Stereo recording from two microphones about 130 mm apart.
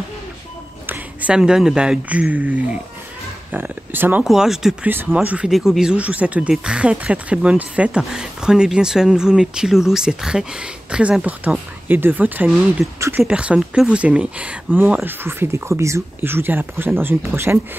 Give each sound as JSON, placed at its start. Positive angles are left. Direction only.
{"t": 0.8, "sound": "speech", "side_deg": -15}
{"t": 4.2, "sound": "speech", "side_deg": -5}
{"t": 4.8, "sound": "speech", "side_deg": -15}
{"t": 12.8, "sound": "speech", "side_deg": 0}